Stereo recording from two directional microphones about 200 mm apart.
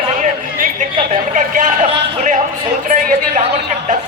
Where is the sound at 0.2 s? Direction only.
40° right (ahead or behind).